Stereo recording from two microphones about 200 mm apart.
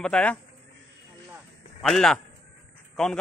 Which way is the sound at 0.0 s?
5° left (ahead or behind).